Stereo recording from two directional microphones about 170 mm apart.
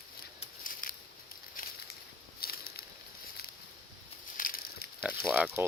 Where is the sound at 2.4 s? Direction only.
60° left (ahead or behind).